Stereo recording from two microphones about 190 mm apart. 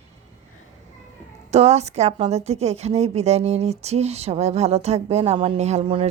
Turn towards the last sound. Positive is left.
turn(degrees=-30)  # may be behind; listen again after turning